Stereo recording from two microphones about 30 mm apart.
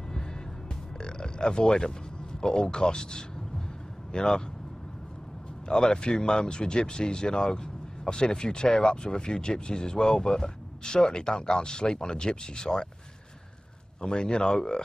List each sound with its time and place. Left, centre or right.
1.0 s grunt: left
2.4 s speech: left
5.7 s speech: left
14.0 s speech: left